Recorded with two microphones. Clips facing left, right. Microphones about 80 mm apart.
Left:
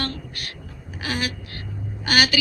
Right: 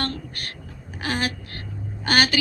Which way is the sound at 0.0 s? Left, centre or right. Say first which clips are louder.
Right 1 dB; right.